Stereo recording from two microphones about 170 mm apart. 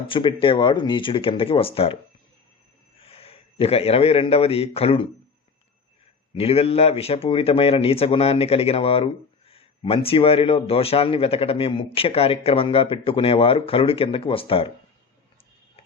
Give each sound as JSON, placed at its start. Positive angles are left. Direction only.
{"t": 0.1, "sound": "speech", "side_deg": 30}
{"t": 3.0, "sound": "a man's voice", "side_deg": 35}
{"t": 6.3, "sound": "speech", "side_deg": 35}